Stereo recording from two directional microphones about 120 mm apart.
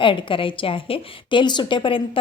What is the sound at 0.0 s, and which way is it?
Speech, 45° left (ahead or behind).